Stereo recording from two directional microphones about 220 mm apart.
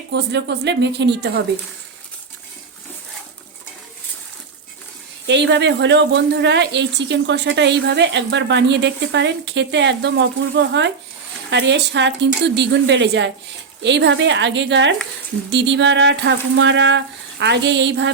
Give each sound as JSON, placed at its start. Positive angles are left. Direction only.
{"t": 0.1, "sound": "a woman's voice", "side_deg": -50}
{"t": 5.2, "sound": "a woman's voice", "side_deg": -55}